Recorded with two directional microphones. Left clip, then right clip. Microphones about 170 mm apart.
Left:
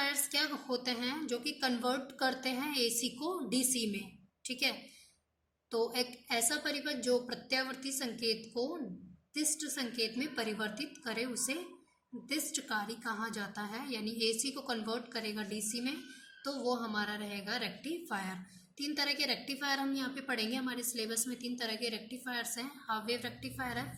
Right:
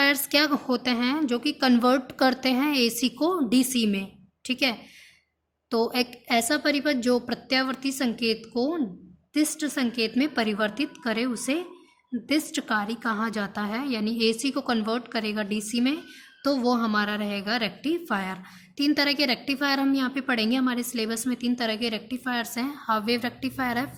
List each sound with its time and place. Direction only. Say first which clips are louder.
0.0 s a woman's voice: right 12 dB; 45° right (ahead or behind)